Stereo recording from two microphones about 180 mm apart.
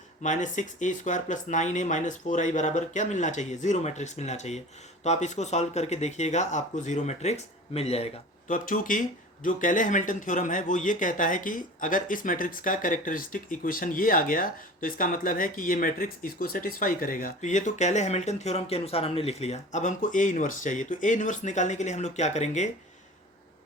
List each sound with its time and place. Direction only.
0.2 s speech: 45° left (ahead or behind)
8.5 s speech: 50° left (ahead or behind)